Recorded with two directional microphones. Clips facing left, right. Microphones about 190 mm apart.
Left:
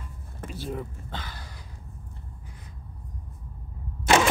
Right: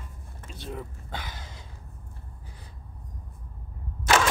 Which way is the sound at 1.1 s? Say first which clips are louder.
Right 1 dB; 20° right (ahead or behind).